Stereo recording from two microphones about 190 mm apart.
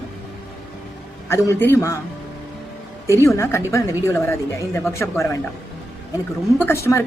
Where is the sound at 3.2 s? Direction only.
15° left (ahead or behind).